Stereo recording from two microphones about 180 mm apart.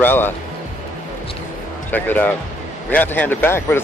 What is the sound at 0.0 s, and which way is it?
Speech, 10° left (ahead or behind).